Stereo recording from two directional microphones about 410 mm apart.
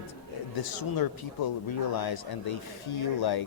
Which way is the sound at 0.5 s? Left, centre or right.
Left.